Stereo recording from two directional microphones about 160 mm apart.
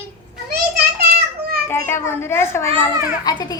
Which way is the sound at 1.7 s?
15° left (ahead or behind).